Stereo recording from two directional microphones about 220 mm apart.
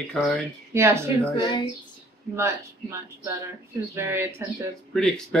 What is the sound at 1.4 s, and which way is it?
Speech, 20° left (ahead or behind).